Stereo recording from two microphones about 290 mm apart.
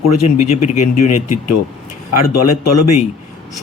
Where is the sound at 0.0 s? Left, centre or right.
Left.